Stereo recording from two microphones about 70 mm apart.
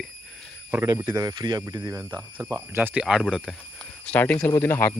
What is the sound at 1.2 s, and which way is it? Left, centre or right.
Speech, right.